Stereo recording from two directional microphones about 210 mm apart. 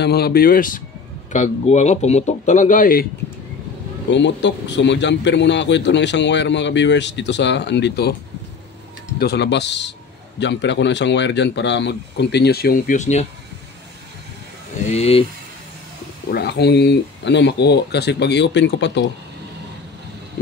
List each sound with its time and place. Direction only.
0.0 s a man's voice: 50° left (ahead or behind)
4.1 s a man's voice: 60° left (ahead or behind)
9.2 s a man's voice: 50° left (ahead or behind); by 13.3 s 35° left (ahead or behind)
14.9 s speech: 30° left (ahead or behind)
16.3 s speech: 50° left (ahead or behind)